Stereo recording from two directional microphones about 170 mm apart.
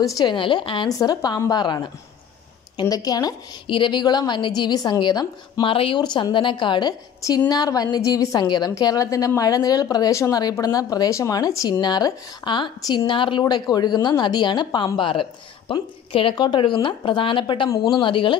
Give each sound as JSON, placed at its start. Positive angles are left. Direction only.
{"t": 0.0, "sound": "a woman's voice", "side_deg": 25}